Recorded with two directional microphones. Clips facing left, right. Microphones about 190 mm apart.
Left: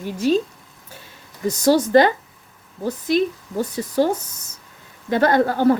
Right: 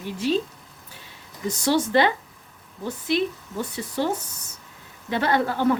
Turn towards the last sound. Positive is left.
turn(degrees=40)  # may be behind; listen again after turning